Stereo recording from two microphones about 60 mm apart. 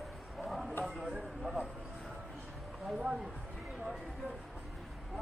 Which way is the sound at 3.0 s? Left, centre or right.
Centre.